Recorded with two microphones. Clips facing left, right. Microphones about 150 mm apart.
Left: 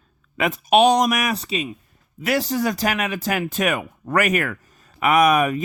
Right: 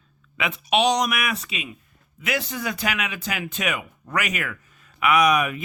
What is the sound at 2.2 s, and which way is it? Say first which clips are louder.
Speech: left 7 dB; 40° left (ahead or behind).